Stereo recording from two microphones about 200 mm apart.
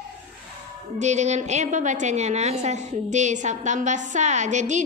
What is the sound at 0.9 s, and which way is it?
A woman's voice, 35° right (ahead or behind).